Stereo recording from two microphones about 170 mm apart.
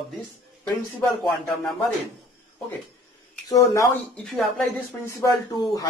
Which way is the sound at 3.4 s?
20° left (ahead or behind).